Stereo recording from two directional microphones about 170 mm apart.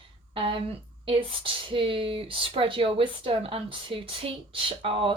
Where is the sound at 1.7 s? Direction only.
30° right (ahead or behind).